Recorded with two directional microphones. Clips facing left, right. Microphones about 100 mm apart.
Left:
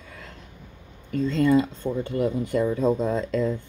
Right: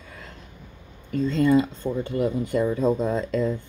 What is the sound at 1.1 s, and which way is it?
Speech, 15° right (ahead or behind).